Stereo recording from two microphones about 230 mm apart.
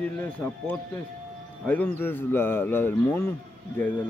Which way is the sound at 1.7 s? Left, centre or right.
Centre.